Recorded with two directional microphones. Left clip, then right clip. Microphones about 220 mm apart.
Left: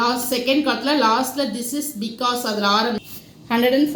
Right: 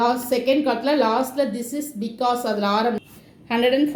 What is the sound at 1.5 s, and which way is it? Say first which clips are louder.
Speech: left 1 dB; 90° right.